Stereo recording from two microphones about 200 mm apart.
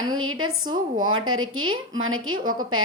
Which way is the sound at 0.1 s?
90° right.